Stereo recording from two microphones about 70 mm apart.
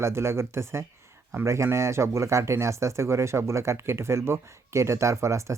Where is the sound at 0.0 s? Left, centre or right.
Right.